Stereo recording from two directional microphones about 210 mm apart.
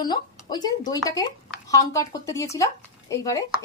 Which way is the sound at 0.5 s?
20° left (ahead or behind).